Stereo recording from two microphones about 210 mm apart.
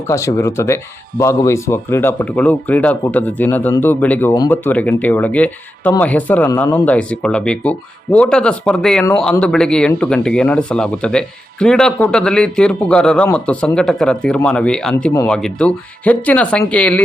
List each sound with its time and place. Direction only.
0.1 s speech: 15° left (ahead or behind)
15.1 s speech: 15° left (ahead or behind)
15.4 s speech: 5° left (ahead or behind)